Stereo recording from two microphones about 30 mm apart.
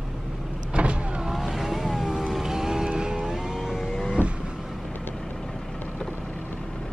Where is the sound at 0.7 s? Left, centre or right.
Right.